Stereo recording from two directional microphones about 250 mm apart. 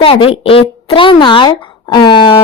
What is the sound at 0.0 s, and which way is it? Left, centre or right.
Speech, left.